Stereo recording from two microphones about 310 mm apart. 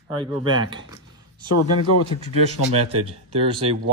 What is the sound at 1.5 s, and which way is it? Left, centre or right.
Speech, left.